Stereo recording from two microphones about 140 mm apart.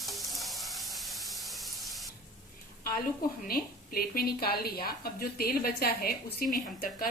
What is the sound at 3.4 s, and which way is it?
A woman's voice, 90° left.